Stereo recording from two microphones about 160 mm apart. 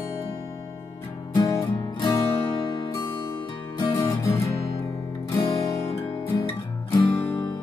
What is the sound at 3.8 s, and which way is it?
Music, 20° left (ahead or behind).